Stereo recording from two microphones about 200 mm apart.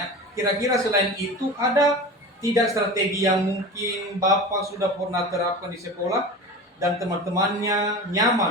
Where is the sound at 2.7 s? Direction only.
15° right (ahead or behind).